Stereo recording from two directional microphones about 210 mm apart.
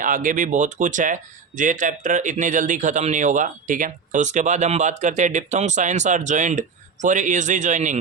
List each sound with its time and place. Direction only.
0.0 s speech: 40° right (ahead or behind)